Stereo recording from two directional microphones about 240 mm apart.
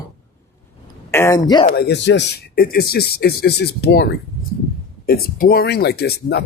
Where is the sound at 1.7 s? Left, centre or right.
Left.